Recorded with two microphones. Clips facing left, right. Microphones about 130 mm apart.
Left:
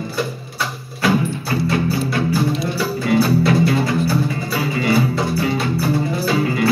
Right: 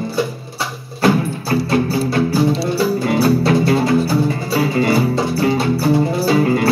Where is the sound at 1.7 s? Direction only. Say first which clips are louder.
Right 3 dB; 35° right (ahead or behind).